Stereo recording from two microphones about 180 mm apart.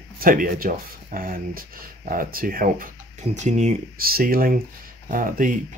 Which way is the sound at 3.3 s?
40° right (ahead or behind).